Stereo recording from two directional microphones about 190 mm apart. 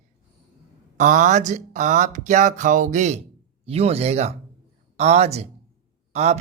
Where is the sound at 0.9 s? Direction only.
40° right (ahead or behind).